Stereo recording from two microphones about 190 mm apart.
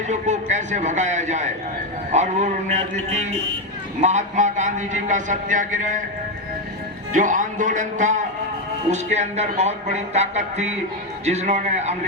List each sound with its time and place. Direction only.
0.1 s a man's voice: 40° right (ahead or behind)
4.0 s a man's voice: 40° right (ahead or behind)
7.1 s a man's voice: 45° right (ahead or behind)